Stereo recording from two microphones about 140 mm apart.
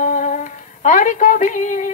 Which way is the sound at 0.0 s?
65° left (ahead or behind).